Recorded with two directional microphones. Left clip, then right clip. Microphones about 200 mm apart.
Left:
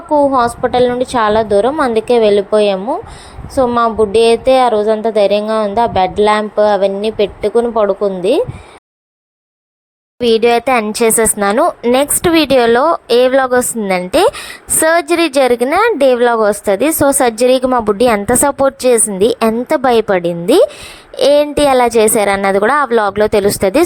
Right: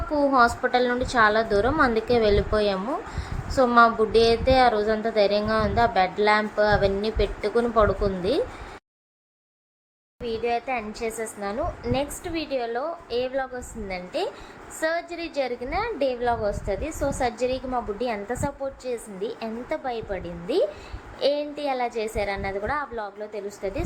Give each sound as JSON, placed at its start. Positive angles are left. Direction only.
{"t": 0.1, "sound": "speech", "side_deg": 30}
{"t": 10.2, "sound": "a woman's voice", "side_deg": 55}